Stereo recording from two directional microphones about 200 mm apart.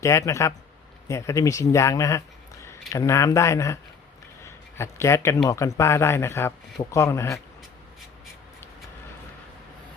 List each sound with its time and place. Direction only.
0.0 s speech: 15° left (ahead or behind)
4.4 s a sound: 15° left (ahead or behind)
5.5 s speech: 15° left (ahead or behind)